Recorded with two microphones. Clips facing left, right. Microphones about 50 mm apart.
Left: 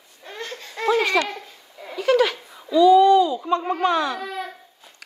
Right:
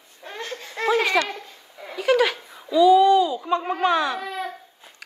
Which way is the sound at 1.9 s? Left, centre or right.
Centre.